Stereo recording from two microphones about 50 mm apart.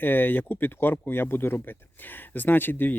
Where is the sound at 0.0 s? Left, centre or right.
Left.